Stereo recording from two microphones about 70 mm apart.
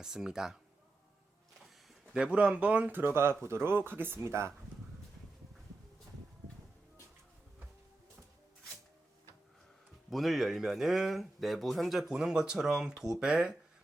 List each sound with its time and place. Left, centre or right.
0.0 s speech: centre
2.1 s speech: centre
3.0 s speech: right
10.1 s speech: centre